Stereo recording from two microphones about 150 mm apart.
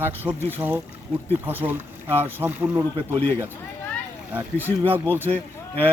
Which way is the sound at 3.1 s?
15° left (ahead or behind).